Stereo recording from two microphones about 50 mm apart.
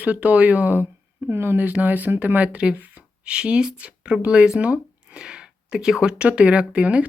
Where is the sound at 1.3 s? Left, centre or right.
Right.